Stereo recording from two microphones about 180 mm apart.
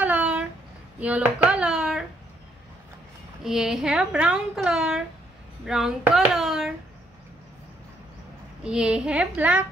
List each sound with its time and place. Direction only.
0.0 s a sound: 5° right (ahead or behind)
3.4 s a child's voice: centre (ahead or behind)
8.6 s a child's voice: 5° right (ahead or behind)